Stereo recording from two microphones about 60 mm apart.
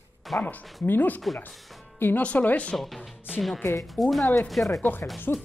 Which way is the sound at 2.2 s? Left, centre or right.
Left.